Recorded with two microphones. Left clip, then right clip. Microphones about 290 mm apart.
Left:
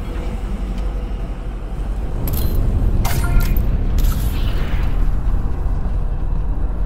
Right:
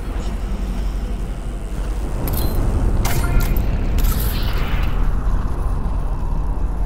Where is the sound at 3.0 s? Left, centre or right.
Centre.